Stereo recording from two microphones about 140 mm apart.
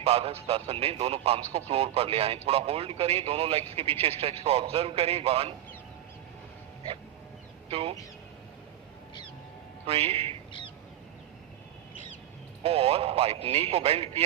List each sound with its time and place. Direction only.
0.0 s speech: 45° right (ahead or behind)
7.7 s speech: 45° right (ahead or behind)
9.8 s speech: 45° right (ahead or behind)
12.6 s speech: 45° right (ahead or behind)